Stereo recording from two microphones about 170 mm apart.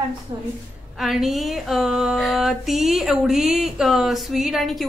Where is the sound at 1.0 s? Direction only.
Centre (ahead or behind).